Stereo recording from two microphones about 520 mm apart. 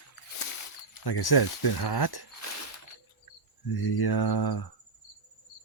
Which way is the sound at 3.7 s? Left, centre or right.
Left.